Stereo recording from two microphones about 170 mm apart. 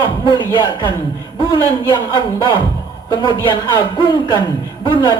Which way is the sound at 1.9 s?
25° left (ahead or behind).